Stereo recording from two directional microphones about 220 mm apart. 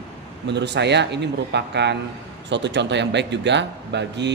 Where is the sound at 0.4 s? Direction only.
50° right (ahead or behind).